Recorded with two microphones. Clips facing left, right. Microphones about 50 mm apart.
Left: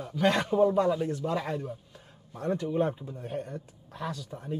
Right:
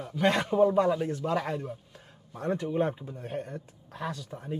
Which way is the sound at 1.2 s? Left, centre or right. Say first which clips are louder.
Right 1 dB; right.